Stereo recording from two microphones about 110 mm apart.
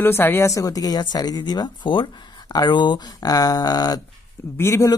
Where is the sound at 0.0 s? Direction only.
20° left (ahead or behind); by 4.0 s 35° left (ahead or behind).